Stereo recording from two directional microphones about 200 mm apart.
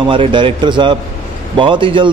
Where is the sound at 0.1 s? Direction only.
25° right (ahead or behind).